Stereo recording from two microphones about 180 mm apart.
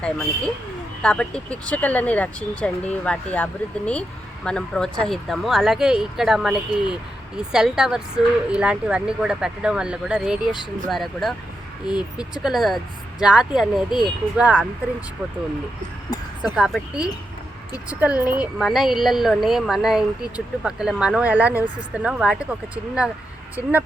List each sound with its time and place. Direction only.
0.0 s a woman's voice: 5° left (ahead or behind)
11.9 s speech: 25° left (ahead or behind)
12.4 s a woman's voice: centre (ahead or behind)
16.6 s a woman's voice: 5° right (ahead or behind)